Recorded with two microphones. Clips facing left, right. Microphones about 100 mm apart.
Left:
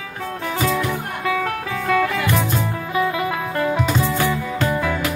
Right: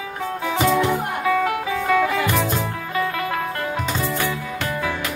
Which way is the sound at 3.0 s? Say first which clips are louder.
Left 3 dB; 15° left (ahead or behind).